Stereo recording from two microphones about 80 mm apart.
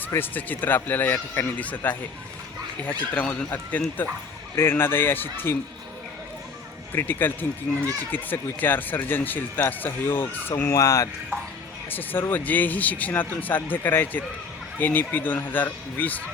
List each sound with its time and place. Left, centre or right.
0.0 s speech: left
3.0 s speech: centre
4.5 s speech: left
6.9 s speech: left
7.7 s speech: centre
8.1 s speech: left
10.7 s speech: left
11.9 s speech: left